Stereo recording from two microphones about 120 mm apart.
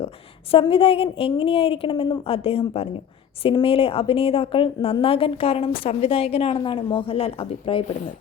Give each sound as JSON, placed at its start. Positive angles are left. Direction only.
{"t": 0.7, "sound": "a woman's voice", "side_deg": 50}